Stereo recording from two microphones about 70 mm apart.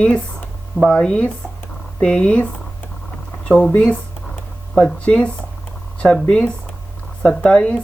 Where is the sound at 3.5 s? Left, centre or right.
Centre.